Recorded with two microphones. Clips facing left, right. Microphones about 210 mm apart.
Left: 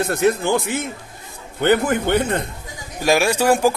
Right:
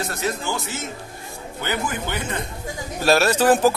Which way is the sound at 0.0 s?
55° left (ahead or behind).